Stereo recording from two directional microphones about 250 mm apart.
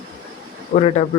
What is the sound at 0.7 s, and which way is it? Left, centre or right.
Speech, left.